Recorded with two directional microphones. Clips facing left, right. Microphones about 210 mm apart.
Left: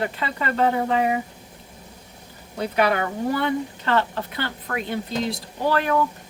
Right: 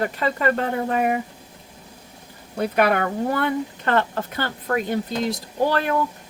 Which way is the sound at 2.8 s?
50° right (ahead or behind).